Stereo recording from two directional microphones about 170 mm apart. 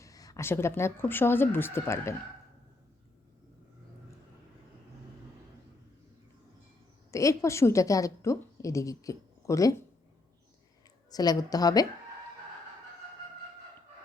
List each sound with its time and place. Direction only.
0.0 s speech: 20° left (ahead or behind)
7.1 s a woman's voice: 20° left (ahead or behind)
11.1 s a woman's voice: 20° left (ahead or behind)